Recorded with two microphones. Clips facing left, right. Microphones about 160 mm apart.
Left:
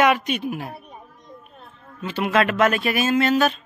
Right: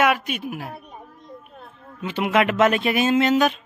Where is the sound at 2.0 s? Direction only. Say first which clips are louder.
Even; 15° right (ahead or behind).